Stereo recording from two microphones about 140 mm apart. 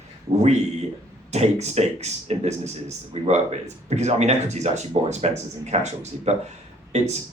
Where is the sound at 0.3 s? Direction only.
50° right (ahead or behind).